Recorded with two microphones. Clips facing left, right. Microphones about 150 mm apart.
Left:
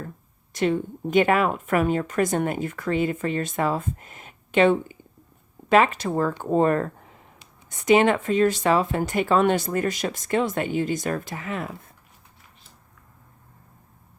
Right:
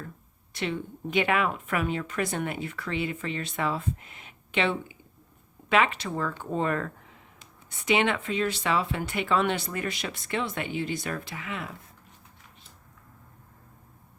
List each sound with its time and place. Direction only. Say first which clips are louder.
0.5 s speech: left 8 dB; 45° left (ahead or behind)